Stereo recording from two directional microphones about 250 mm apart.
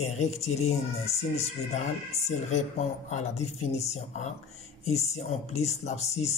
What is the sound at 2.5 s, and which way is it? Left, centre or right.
Speech, left.